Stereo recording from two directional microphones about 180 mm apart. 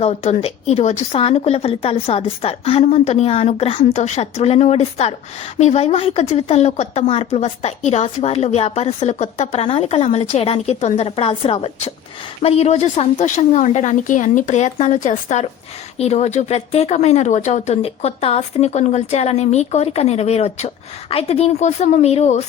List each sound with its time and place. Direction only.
0.0 s speech: 35° left (ahead or behind)